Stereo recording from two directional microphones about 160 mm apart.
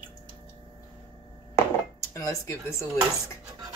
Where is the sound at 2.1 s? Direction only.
20° left (ahead or behind).